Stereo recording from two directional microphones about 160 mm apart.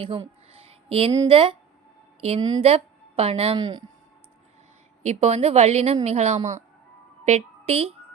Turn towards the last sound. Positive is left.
turn(degrees=-40)  # may be behind; listen again after turning